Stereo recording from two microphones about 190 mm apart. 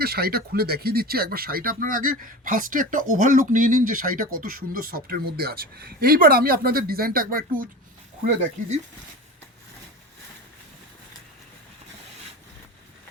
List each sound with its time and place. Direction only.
0.0 s speech: 55° right (ahead or behind)